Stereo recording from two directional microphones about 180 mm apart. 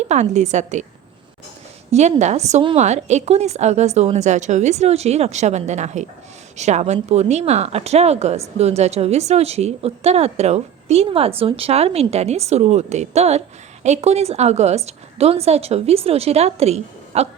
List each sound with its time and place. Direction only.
0.1 s speech: 40° right (ahead or behind)
1.9 s speech: 40° right (ahead or behind)